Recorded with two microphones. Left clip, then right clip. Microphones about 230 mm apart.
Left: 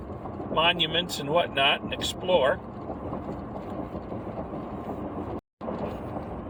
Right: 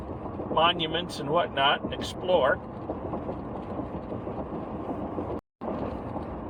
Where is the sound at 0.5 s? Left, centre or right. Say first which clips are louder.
Left 1 dB; centre.